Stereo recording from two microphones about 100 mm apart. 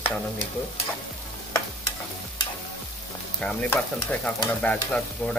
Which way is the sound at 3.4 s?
10° left (ahead or behind).